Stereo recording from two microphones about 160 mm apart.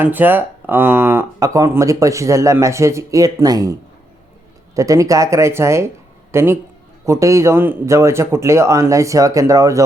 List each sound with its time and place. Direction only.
0.0 s speech: 10° right (ahead or behind)